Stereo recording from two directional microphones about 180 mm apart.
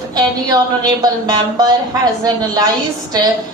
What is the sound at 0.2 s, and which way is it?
Speech, 20° right (ahead or behind).